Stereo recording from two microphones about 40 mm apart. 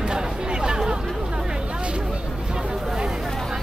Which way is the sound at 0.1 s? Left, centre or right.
Centre.